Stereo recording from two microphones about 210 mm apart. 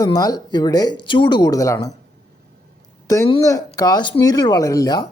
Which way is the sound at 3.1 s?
20° left (ahead or behind).